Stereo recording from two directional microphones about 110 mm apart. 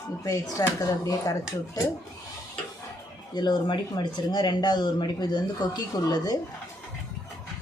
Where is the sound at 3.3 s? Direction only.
40° left (ahead or behind).